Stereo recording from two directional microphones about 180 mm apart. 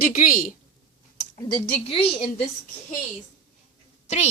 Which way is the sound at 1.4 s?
25° left (ahead or behind).